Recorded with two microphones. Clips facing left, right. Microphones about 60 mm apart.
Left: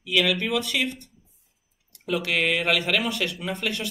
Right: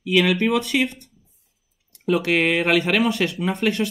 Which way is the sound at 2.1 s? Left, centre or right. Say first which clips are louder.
Right 5 dB; right.